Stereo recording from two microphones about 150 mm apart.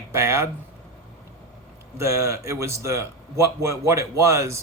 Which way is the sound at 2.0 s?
20° right (ahead or behind).